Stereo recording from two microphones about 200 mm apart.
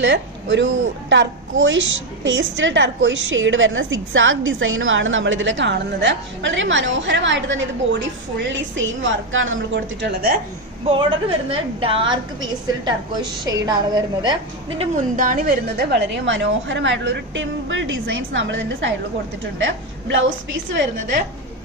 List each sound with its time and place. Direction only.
0.0 s a woman's voice: 65° right (ahead or behind)
10.0 s speech: 45° right (ahead or behind)
10.9 s a woman's voice: 25° right (ahead or behind)
15.1 s a woman's voice: 40° right (ahead or behind); by 20.9 s 70° right (ahead or behind)